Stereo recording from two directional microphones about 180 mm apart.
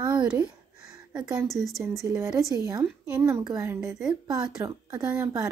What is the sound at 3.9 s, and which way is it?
Speech, 5° right (ahead or behind).